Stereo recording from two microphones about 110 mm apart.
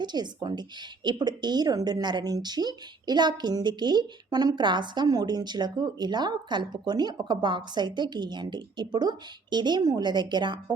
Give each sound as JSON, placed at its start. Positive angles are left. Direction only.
{"t": 0.0, "sound": "a woman's voice", "side_deg": -40}